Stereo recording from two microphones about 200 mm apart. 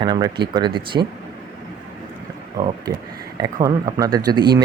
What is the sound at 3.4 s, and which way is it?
Speech, 15° right (ahead or behind).